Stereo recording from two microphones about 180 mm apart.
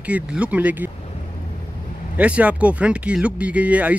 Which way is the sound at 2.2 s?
5° right (ahead or behind).